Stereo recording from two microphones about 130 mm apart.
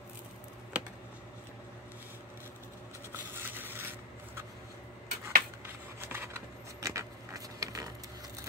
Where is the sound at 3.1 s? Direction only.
15° right (ahead or behind).